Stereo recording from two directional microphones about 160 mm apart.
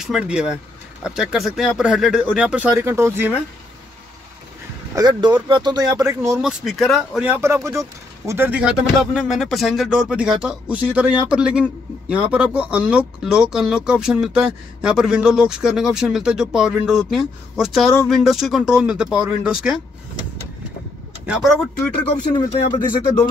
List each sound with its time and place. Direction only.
0.0 s speech: 5° right (ahead or behind)
4.9 s speech: 25° right (ahead or behind)
6.4 s speech: centre (ahead or behind)
7.2 s speech: 15° right (ahead or behind)
21.3 s speech: centre (ahead or behind)